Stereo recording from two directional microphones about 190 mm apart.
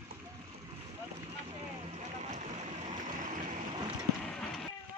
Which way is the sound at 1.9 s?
35° right (ahead or behind).